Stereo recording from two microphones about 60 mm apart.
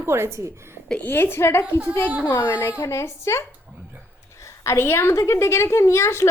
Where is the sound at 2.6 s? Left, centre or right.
Left.